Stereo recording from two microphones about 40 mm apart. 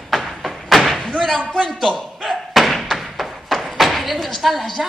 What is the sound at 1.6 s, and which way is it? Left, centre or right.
Speech, centre.